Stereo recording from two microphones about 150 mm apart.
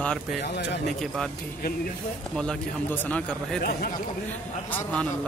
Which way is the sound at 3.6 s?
80° left.